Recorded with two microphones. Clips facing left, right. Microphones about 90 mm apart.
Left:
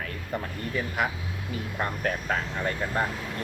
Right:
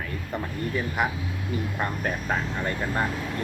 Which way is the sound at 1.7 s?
10° right (ahead or behind).